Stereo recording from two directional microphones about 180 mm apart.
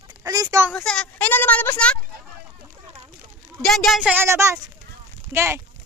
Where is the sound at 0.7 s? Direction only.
5° left (ahead or behind).